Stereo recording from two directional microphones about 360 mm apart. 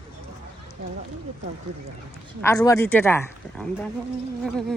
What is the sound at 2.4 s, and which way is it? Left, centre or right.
Speech, centre.